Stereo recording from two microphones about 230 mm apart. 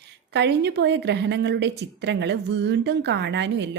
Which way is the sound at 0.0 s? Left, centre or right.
Right.